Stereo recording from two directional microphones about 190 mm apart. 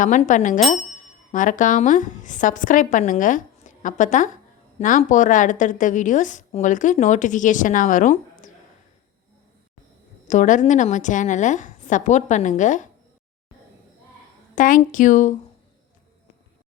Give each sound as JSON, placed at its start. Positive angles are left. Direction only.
{"t": 0.0, "sound": "a woman's voice", "side_deg": 40}
{"t": 10.2, "sound": "speech", "side_deg": 40}
{"t": 14.5, "sound": "a woman's voice", "side_deg": 45}